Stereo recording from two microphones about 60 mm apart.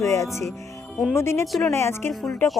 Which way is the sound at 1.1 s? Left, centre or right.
Left.